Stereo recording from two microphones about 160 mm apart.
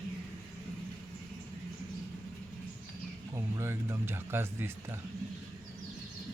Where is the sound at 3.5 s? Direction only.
15° right (ahead or behind).